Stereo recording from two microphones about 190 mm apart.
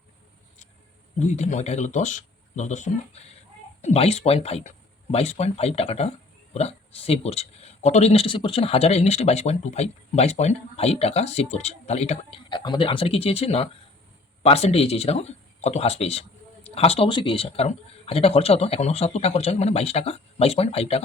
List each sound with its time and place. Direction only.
1.3 s speech: 40° left (ahead or behind)